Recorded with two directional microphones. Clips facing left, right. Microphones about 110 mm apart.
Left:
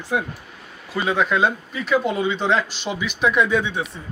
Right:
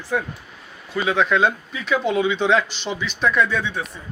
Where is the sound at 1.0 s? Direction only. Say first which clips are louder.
Right 1 dB; 5° left (ahead or behind).